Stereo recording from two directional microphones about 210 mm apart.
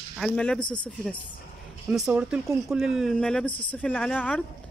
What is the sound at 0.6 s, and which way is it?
Speech, 20° left (ahead or behind).